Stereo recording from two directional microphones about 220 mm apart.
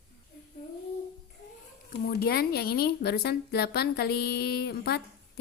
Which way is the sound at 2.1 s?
45° left (ahead or behind).